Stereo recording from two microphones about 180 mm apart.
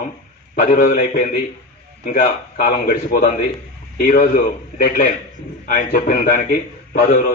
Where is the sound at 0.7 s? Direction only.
50° left (ahead or behind).